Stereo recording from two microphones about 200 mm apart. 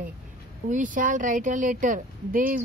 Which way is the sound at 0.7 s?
40° right (ahead or behind).